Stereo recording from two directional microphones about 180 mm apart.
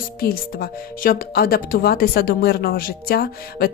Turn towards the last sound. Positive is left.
turn(degrees=55)  # may be behind; listen again after turning